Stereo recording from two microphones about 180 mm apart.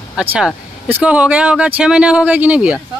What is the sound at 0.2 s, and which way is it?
Speech, 10° right (ahead or behind).